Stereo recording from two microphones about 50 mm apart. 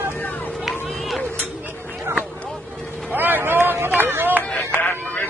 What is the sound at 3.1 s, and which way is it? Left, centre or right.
Run, right.